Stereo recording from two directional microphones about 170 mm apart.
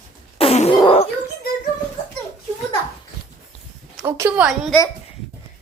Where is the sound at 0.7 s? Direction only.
30° left (ahead or behind).